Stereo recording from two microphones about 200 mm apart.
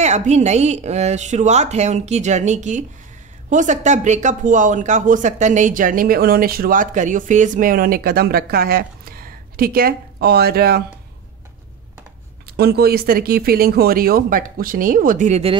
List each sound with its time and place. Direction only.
0.0 s speech: 35° right (ahead or behind); by 10.8 s 50° right (ahead or behind)
12.4 s speech: 50° right (ahead or behind); by 15.6 s 30° right (ahead or behind)